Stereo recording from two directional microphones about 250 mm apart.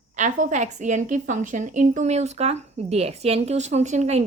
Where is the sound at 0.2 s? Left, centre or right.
Right.